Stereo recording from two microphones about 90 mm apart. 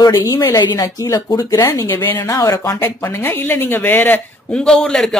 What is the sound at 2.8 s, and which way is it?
Speech, 30° left (ahead or behind).